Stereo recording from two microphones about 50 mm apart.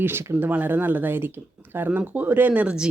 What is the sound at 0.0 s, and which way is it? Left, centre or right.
Speech, right.